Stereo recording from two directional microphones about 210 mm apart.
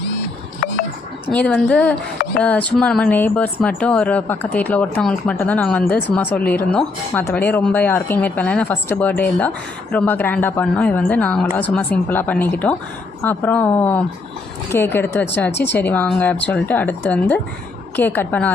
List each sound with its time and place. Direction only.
1.3 s speech: 5° left (ahead or behind)